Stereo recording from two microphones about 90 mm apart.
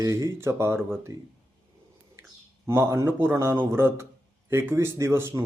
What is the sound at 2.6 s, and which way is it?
A man's voice, 30° right (ahead or behind).